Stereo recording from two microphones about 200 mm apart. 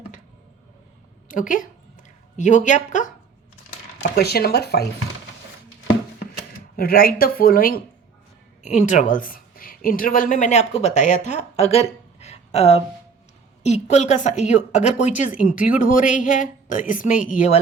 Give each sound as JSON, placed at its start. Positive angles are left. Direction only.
{"t": 1.3, "sound": "a woman's voice", "side_deg": 40}
{"t": 4.1, "sound": "speech", "side_deg": 50}
{"t": 6.7, "sound": "a woman's voice", "side_deg": 45}